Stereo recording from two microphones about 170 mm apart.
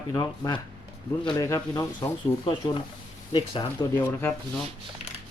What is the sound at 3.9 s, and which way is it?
Speech, 15° left (ahead or behind).